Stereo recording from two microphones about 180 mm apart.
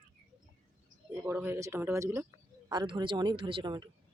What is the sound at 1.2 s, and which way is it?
Speech, 10° right (ahead or behind).